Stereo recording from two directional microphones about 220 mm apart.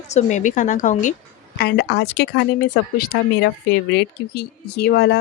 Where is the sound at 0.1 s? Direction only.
30° left (ahead or behind).